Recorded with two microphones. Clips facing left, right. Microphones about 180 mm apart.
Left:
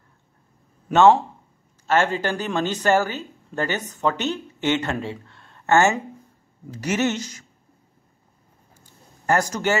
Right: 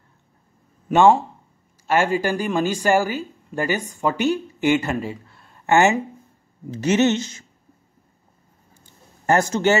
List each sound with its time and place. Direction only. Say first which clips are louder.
0.8 s speech: even; 10° right (ahead or behind)
6.7 s speech: right 5 dB; 25° right (ahead or behind)
9.2 s speech: right 3 dB; 25° right (ahead or behind)